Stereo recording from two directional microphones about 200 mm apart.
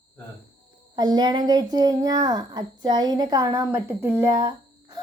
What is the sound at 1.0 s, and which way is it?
A child's voice, 20° right (ahead or behind).